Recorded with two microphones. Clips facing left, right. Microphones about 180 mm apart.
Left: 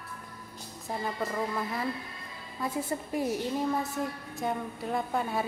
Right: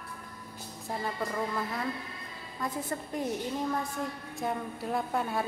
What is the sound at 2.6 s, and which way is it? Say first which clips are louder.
A woman's voice: left 2 dB; 5° left (ahead or behind).